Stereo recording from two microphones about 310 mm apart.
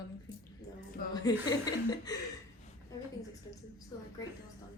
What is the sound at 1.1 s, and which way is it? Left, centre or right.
Speech, centre.